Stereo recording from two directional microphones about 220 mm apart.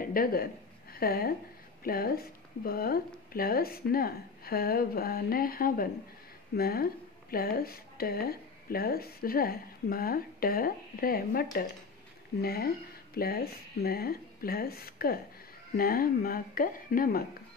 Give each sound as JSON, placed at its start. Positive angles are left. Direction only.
{"t": 0.0, "sound": "a woman's voice", "side_deg": 40}